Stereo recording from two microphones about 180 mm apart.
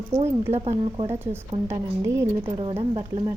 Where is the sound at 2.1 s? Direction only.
15° right (ahead or behind).